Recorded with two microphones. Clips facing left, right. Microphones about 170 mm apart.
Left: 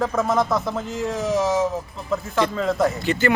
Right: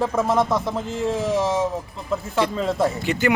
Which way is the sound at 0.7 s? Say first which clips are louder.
Right 2 dB; 30° right (ahead or behind).